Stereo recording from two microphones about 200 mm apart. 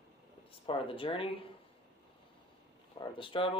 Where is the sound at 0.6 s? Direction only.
25° left (ahead or behind).